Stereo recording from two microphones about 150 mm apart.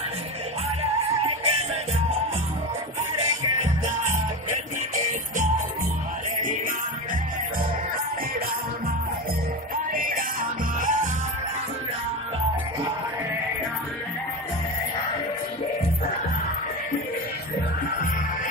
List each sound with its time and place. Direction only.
3.6 s music: 55° right (ahead or behind)
9.9 s music: 70° right (ahead or behind)